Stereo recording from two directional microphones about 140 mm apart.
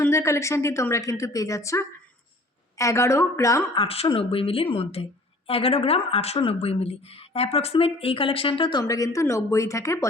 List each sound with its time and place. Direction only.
0.0 s a woman's voice: 20° left (ahead or behind)
3.8 s a woman's voice: 45° left (ahead or behind)
8.8 s a woman's voice: 25° left (ahead or behind)